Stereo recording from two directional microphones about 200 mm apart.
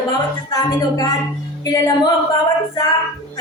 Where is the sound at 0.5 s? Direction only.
15° left (ahead or behind).